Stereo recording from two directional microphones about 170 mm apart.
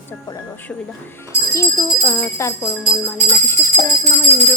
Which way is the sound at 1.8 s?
5° left (ahead or behind).